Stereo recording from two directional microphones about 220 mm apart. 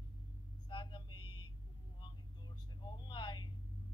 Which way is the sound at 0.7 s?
20° left (ahead or behind).